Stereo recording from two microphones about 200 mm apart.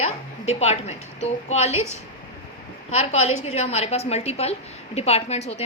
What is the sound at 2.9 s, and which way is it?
A woman's voice, 30° left (ahead or behind).